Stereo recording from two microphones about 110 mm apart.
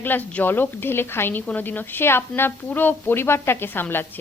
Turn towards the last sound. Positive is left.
turn(degrees=20)  # may be behind; listen again after turning